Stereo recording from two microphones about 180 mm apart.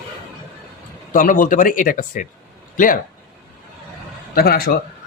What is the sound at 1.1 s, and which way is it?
Speech, 50° left (ahead or behind).